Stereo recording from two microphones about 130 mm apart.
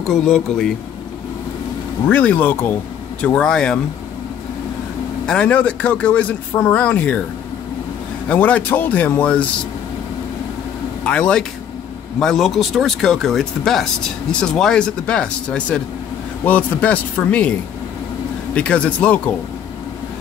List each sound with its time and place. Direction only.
0.1 s speech: 5° left (ahead or behind)
2.0 s speech: 10° left (ahead or behind)
5.2 s speech: 10° left (ahead or behind)
8.3 s speech: 10° left (ahead or behind)
11.1 s speech: 10° left (ahead or behind)